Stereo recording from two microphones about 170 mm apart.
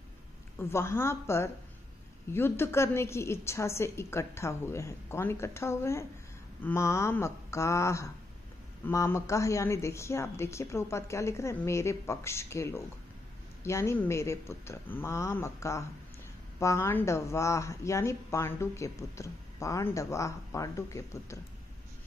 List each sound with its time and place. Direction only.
0.6 s speech: 15° left (ahead or behind)